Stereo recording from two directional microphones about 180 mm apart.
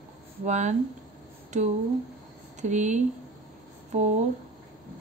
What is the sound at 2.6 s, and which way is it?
Speech, 40° right (ahead or behind).